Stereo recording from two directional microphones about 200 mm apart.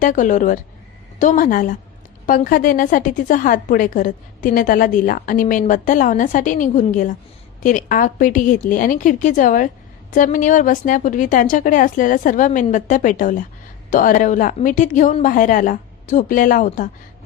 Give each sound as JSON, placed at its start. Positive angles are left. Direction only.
{"t": 0.0, "sound": "a woman's voice", "side_deg": 40}